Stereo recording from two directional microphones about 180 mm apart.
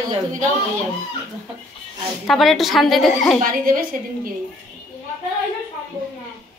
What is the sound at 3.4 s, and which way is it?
Speech, 55° right (ahead or behind).